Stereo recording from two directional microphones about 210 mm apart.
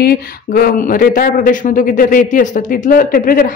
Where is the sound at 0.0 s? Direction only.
45° left (ahead or behind).